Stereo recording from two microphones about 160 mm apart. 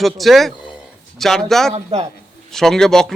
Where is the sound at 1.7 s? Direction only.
45° right (ahead or behind).